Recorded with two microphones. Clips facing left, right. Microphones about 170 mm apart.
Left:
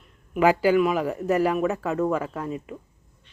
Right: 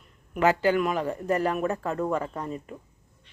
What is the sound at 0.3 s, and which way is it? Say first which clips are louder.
Speech: left 3 dB; 10° left (ahead or behind).